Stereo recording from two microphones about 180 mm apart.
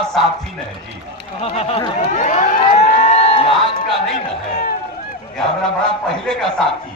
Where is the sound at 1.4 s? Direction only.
35° left (ahead or behind).